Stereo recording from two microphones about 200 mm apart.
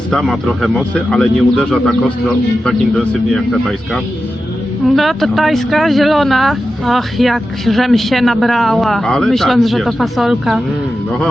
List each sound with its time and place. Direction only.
0.1 s speech: centre (ahead or behind)